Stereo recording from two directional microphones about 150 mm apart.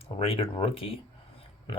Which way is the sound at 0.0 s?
40° left (ahead or behind).